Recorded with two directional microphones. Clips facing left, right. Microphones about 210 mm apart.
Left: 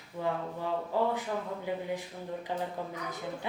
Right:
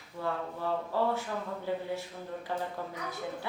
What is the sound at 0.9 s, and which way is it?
Speech, 15° left (ahead or behind).